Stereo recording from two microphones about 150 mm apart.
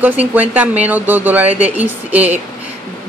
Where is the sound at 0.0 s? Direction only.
10° right (ahead or behind).